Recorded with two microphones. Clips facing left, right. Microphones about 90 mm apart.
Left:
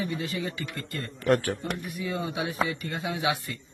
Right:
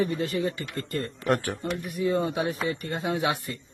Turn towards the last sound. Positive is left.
turn(degrees=-45)  # may be behind; listen again after turning